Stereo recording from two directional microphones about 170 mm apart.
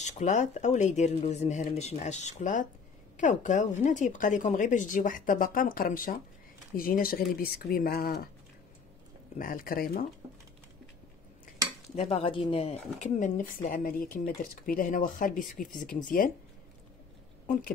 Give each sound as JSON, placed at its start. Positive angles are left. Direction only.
{"t": 0.0, "sound": "speech", "side_deg": 45}
{"t": 9.4, "sound": "speech", "side_deg": 55}
{"t": 11.9, "sound": "speech", "side_deg": 35}